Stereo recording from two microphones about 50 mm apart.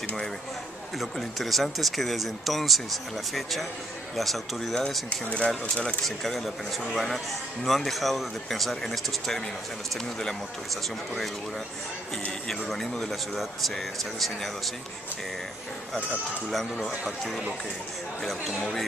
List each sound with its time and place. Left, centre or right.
0.9 s speech: centre
5.2 s speech: left
6.0 s speech: centre
12.4 s speech: centre
16.4 s speech: centre
17.0 s speech: centre
18.5 s speech: centre